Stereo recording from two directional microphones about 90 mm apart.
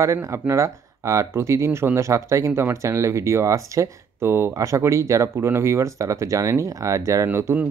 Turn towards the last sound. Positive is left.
turn(degrees=-30)  # may be behind; listen again after turning